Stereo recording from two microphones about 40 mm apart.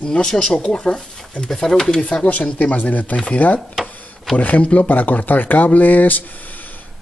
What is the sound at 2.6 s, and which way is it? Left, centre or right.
Speech, left.